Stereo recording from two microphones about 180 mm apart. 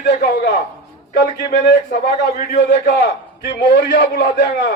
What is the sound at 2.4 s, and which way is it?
A man's voice, 60° left (ahead or behind).